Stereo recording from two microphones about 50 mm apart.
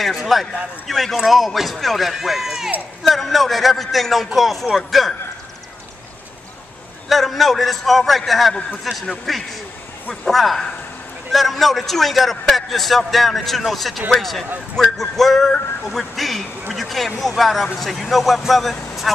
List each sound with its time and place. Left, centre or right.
0.0 s a man's voice: centre
7.1 s a man's voice: centre